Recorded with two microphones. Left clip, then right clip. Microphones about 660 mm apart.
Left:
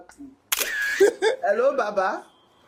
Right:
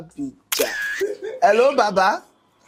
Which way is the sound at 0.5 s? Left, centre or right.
Centre.